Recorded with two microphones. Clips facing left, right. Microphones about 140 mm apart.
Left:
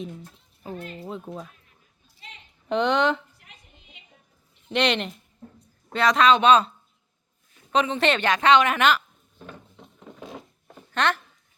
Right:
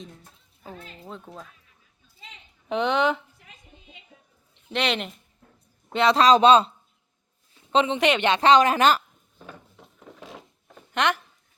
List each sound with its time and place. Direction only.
0.0 s a sound: 5° left (ahead or behind)
1.0 s speech: 5° left (ahead or behind)
2.6 s speech: 5° right (ahead or behind)
4.7 s speech: 5° right (ahead or behind)
5.9 s a woman's voice: 25° right (ahead or behind)
7.7 s a woman's voice: 25° right (ahead or behind)
7.9 s a woman's voice: 15° right (ahead or behind)
8.3 s a woman's voice: 30° right (ahead or behind)
9.5 s a sound: 5° right (ahead or behind)
10.9 s speech: 15° right (ahead or behind)